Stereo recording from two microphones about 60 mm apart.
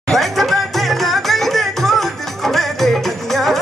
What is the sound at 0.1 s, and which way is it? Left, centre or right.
Music, centre.